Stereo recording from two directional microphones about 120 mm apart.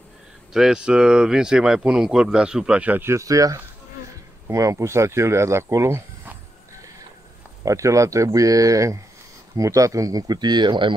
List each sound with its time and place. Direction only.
0.5 s speech: 5° right (ahead or behind); by 6.3 s 20° right (ahead or behind)
7.6 s speech: 25° right (ahead or behind); by 11.0 s 40° right (ahead or behind)